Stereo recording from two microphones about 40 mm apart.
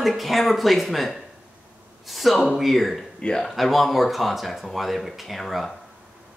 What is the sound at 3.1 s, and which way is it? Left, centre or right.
Speech, left.